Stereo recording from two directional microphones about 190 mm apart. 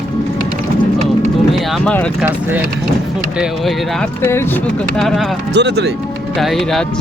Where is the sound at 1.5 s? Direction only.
Centre (ahead or behind).